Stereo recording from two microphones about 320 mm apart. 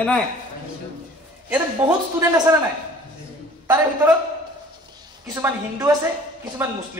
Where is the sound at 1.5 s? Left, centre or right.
Centre.